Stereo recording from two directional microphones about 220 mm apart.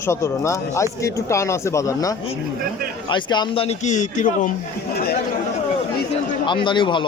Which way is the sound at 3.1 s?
20° left (ahead or behind).